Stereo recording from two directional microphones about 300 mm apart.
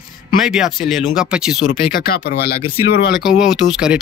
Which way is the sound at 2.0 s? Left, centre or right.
Left.